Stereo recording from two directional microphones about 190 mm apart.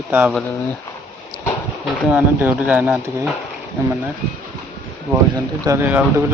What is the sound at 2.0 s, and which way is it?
Speech, 5° right (ahead or behind).